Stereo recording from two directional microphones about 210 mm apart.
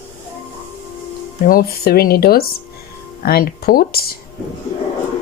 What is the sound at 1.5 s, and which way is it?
Speech, 45° left (ahead or behind).